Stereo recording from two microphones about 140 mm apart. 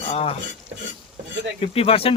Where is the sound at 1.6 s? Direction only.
45° left (ahead or behind).